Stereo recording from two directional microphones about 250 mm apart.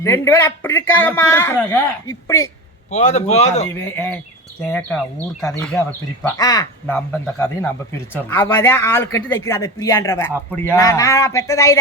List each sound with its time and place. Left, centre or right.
0.0 s speech: centre
2.9 s speech: left
3.8 s speech: centre
6.2 s speech: centre